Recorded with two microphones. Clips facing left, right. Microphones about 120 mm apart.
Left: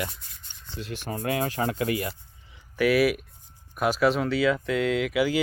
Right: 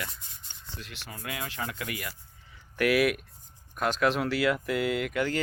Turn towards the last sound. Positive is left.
turn(degrees=5)  # may be behind; listen again after turning